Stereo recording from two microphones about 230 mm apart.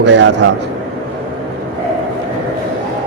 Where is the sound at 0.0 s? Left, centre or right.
Right.